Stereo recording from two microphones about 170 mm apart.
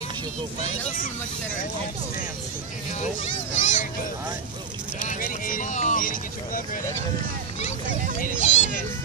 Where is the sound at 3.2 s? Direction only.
45° left (ahead or behind).